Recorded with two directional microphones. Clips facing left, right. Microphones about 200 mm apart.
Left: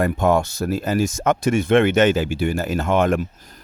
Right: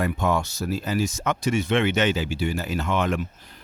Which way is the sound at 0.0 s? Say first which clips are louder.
Left 6 dB; 50° left (ahead or behind).